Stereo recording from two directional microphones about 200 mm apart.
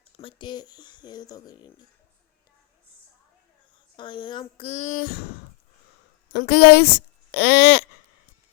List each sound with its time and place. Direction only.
0.2 s speech: 25° left (ahead or behind)
3.9 s speech: 25° left (ahead or behind); by 5.3 s 50° left (ahead or behind)
6.3 s speech: 55° left (ahead or behind)